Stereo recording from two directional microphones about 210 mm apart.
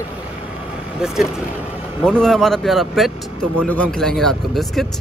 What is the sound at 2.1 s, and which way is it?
Speech, centre (ahead or behind).